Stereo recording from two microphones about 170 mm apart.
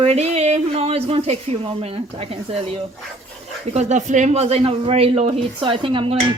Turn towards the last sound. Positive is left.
turn(degrees=-30)  # may be behind; listen again after turning